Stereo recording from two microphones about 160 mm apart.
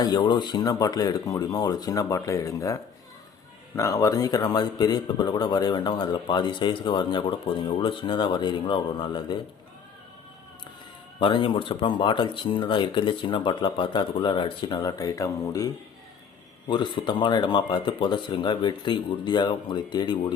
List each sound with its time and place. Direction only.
0.0 s a man's voice: 25° left (ahead or behind)
11.2 s a man's voice: 30° left (ahead or behind)